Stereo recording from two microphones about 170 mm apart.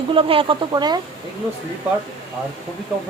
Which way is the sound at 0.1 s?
30° right (ahead or behind).